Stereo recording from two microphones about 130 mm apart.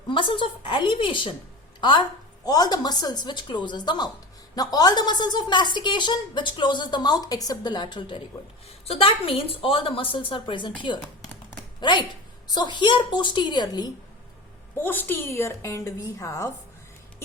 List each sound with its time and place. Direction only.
0.1 s a woman's voice: 40° left (ahead or behind)
14.8 s a woman's voice: 15° left (ahead or behind)